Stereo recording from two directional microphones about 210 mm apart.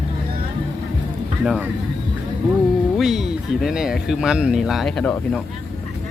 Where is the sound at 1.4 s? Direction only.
Centre (ahead or behind).